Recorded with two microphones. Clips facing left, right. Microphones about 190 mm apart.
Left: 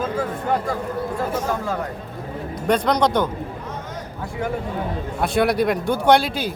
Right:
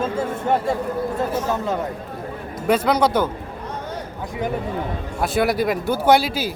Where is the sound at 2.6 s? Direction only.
5° right (ahead or behind).